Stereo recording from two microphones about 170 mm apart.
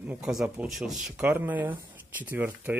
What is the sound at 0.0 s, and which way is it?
Speech, 5° right (ahead or behind).